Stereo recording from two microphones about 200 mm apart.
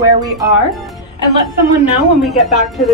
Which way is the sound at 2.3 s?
Centre (ahead or behind).